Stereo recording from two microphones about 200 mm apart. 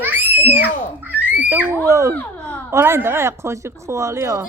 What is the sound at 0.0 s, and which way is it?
Babbling, 10° right (ahead or behind).